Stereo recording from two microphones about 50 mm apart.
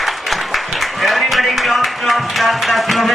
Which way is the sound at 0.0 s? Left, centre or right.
Centre.